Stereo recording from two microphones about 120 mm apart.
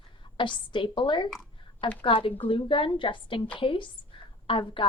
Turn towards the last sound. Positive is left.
turn(degrees=45)  # may be behind; listen again after turning